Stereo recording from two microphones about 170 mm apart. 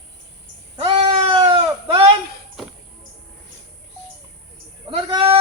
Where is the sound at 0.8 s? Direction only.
30° right (ahead or behind).